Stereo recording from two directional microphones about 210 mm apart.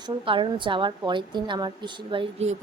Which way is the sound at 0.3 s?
25° right (ahead or behind).